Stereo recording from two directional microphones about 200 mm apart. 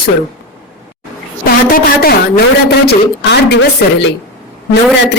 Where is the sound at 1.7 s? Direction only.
50° left (ahead or behind).